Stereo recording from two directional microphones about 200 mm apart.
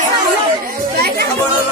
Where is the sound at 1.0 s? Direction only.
50° right (ahead or behind).